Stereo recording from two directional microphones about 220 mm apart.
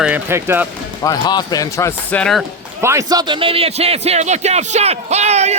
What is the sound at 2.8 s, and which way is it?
Speech, 15° right (ahead or behind).